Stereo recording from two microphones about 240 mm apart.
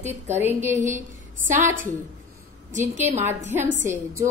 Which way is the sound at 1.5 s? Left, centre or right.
Right.